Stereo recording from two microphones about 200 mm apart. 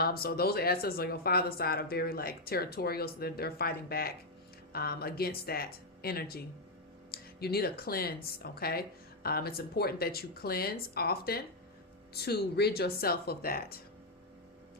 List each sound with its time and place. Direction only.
0.0 s speech: 50° left (ahead or behind)